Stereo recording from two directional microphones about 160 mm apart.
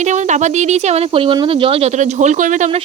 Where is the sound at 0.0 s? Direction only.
45° right (ahead or behind).